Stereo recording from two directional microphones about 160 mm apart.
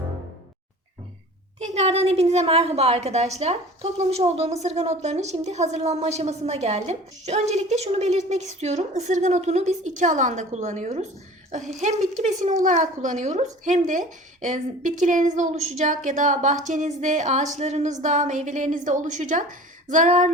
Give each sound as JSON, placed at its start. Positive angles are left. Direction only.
{"t": 1.5, "sound": "a woman's voice", "side_deg": -45}